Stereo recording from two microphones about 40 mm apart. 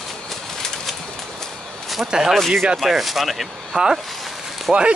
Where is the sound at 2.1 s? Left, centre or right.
Centre.